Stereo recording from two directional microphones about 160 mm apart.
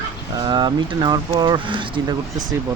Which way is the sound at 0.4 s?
25° right (ahead or behind).